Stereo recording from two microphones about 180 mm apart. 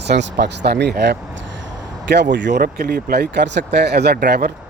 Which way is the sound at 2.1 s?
75° right (ahead or behind).